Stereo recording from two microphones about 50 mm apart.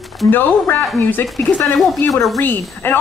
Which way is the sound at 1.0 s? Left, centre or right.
Left.